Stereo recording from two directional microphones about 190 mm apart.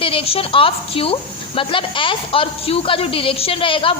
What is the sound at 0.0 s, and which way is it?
A woman's voice, 30° left (ahead or behind).